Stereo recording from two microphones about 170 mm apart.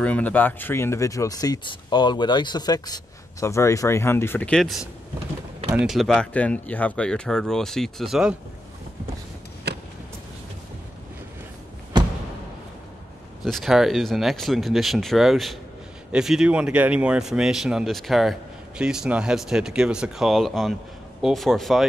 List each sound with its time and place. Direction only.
0.0 s speech: 10° left (ahead or behind)
5.9 s speech: centre (ahead or behind)
11.9 s a sound: 25° right (ahead or behind)
13.4 s speech: centre (ahead or behind)